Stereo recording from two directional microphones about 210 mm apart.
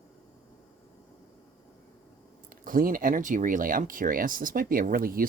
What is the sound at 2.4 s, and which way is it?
Speech, 40° right (ahead or behind).